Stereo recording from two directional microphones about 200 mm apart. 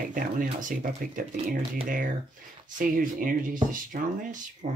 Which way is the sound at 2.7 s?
45° right (ahead or behind).